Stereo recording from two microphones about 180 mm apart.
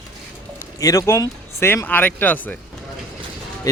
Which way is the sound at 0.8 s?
20° left (ahead or behind).